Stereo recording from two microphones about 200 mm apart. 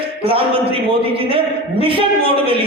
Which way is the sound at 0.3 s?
25° right (ahead or behind).